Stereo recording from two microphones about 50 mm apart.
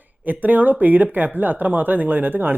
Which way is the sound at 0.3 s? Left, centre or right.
Right.